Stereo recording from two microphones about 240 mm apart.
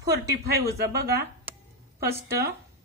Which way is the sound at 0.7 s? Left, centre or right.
Right.